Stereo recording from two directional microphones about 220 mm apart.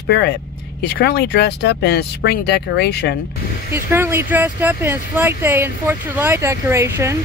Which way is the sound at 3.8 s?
10° right (ahead or behind).